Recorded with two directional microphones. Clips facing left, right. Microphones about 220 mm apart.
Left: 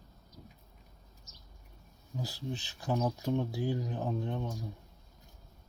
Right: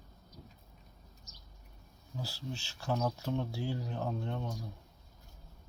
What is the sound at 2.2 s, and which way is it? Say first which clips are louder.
Speech: left 3 dB; 15° left (ahead or behind).